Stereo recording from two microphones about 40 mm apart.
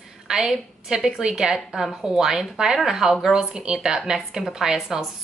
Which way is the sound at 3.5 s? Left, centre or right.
Centre.